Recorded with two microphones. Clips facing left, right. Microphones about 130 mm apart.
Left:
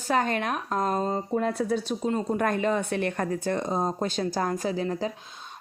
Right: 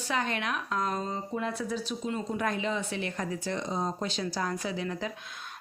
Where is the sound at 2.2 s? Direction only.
50° left (ahead or behind); by 5.1 s 35° left (ahead or behind).